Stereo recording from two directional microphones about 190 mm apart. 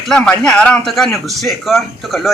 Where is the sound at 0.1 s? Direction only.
5° left (ahead or behind).